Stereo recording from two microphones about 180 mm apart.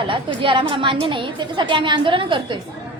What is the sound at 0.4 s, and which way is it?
A woman's voice, 30° right (ahead or behind).